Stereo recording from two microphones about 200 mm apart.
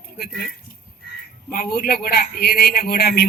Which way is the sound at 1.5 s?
50° left (ahead or behind).